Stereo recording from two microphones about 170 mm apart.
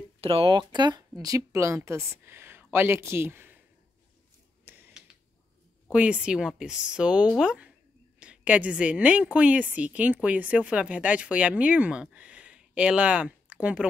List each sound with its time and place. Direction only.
0.2 s a woman's voice: 35° right (ahead or behind); by 3.6 s 10° right (ahead or behind)
4.6 s a sound: 10° right (ahead or behind)
5.9 s a woman's voice: 5° right (ahead or behind)